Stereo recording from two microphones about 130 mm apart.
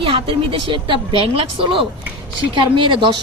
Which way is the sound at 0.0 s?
40° right (ahead or behind).